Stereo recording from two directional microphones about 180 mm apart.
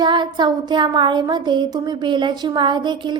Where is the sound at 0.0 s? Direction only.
25° right (ahead or behind).